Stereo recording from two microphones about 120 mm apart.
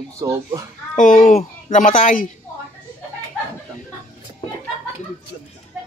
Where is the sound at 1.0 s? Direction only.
90° left.